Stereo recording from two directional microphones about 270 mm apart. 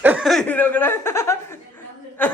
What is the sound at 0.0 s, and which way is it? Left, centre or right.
Chuckle, centre.